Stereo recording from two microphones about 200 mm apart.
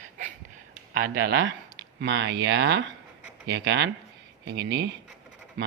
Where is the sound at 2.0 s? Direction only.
60° right (ahead or behind).